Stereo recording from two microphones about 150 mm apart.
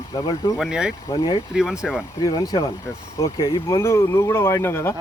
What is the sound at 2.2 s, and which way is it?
Speech, 25° left (ahead or behind).